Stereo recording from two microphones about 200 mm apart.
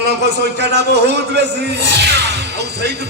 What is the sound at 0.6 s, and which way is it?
Speech, 55° right (ahead or behind).